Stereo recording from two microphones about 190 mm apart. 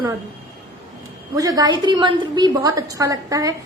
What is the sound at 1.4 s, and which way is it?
A woman's voice, 20° right (ahead or behind).